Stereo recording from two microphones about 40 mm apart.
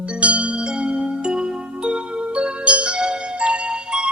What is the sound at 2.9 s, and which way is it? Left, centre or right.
Music, centre.